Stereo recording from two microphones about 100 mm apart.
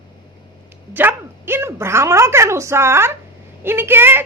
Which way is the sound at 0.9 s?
20° right (ahead or behind).